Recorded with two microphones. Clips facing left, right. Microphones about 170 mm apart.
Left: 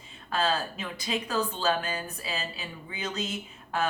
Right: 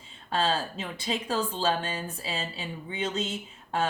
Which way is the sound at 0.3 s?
30° right (ahead or behind).